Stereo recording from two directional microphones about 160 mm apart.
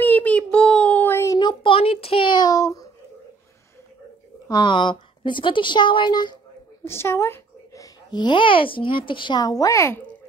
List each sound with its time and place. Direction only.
0.0 s a sound: 10° left (ahead or behind)
4.5 s speech: 30° left (ahead or behind)
6.8 s a child's voice: 15° left (ahead or behind)